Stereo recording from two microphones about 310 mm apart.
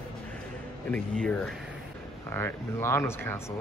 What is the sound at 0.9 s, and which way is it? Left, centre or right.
Speech, centre.